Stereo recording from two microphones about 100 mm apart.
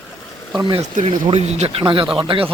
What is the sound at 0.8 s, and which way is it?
Speech, 90° right.